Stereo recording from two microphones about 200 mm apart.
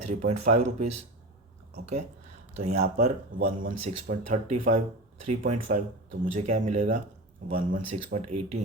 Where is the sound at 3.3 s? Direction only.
45° right (ahead or behind).